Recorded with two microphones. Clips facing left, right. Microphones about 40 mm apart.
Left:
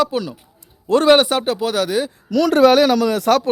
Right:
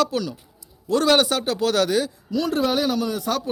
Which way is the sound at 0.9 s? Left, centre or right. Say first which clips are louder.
Left 6 dB; left.